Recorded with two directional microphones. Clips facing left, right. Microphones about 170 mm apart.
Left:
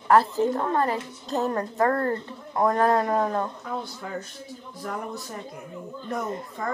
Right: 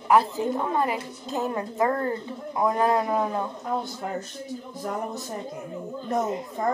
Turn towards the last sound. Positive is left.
turn(degrees=-20)  # may be behind; listen again after turning